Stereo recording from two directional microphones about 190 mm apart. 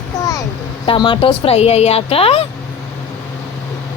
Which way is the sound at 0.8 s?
25° left (ahead or behind).